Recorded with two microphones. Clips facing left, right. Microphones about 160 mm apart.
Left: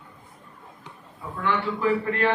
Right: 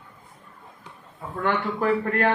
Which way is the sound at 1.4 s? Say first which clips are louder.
Right 1 dB; 50° right (ahead or behind).